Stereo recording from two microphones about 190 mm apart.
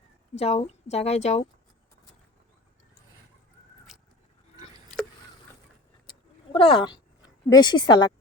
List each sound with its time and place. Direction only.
0.3 s speech: 35° left (ahead or behind)
6.1 s a sound: 30° left (ahead or behind)
7.5 s a woman's voice: 25° left (ahead or behind)